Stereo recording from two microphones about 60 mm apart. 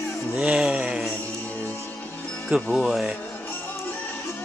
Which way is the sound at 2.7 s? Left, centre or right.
Centre.